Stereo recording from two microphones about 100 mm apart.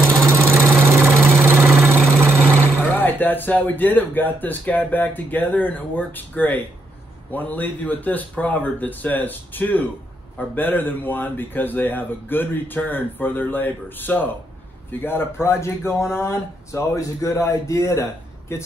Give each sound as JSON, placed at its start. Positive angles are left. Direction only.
{"t": 0.1, "sound": "engine", "side_deg": -25}
{"t": 2.8, "sound": "a man's voice", "side_deg": 20}